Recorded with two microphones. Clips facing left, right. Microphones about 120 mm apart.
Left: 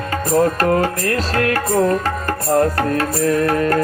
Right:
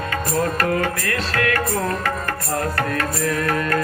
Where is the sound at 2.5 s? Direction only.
30° left (ahead or behind).